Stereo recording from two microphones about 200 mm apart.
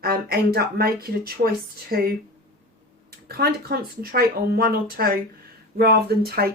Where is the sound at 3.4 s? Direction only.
50° right (ahead or behind).